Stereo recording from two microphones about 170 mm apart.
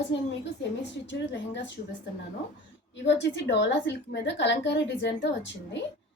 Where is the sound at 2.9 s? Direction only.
90° left.